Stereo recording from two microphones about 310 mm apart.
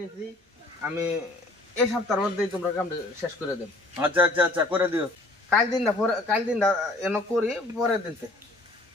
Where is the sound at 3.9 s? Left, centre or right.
Centre.